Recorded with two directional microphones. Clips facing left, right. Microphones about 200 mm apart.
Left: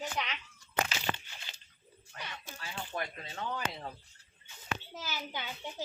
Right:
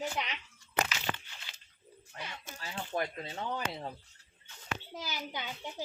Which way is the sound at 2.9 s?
35° right (ahead or behind).